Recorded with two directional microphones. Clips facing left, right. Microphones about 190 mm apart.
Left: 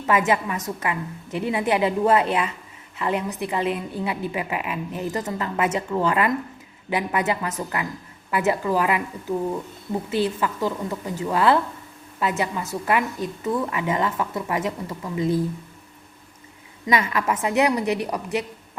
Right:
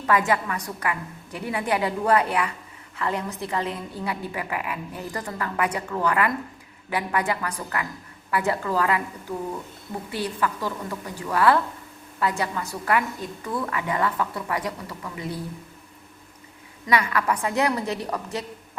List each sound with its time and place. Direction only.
0.0 s a woman's voice: 20° left (ahead or behind)
10.1 s a woman's voice: 20° left (ahead or behind)
16.8 s a woman's voice: 20° left (ahead or behind)